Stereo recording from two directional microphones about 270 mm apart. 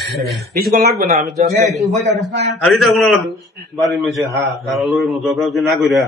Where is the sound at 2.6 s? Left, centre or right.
Centre.